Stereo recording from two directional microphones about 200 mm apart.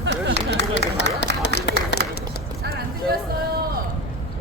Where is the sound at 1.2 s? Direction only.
65° left (ahead or behind).